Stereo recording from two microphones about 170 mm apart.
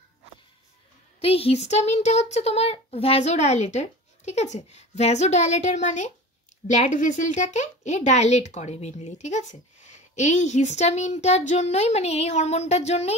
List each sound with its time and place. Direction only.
1.2 s a child's voice: 35° left (ahead or behind)